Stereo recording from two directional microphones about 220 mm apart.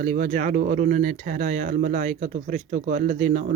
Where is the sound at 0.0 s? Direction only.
35° right (ahead or behind).